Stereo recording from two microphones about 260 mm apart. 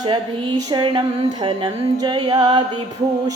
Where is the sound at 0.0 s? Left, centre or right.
Centre.